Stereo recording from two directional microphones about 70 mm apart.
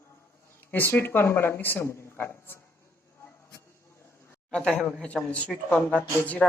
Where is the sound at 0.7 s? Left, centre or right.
Left.